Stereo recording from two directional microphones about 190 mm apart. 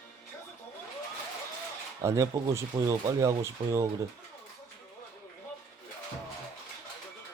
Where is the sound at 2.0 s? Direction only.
15° right (ahead or behind).